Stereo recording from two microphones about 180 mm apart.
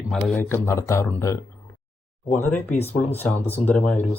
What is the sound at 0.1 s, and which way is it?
Speech, 10° left (ahead or behind).